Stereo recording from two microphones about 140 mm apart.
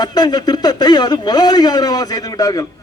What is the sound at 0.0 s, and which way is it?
Speech, 30° left (ahead or behind).